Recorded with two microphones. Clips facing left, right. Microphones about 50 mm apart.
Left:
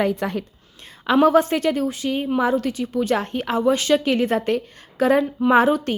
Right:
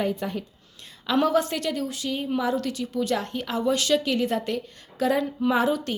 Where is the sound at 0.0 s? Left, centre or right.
Left.